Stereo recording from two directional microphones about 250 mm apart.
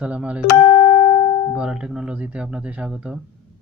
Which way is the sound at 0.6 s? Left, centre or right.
Centre.